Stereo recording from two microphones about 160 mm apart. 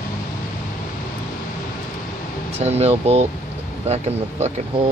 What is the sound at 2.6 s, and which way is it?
Speech, 45° right (ahead or behind).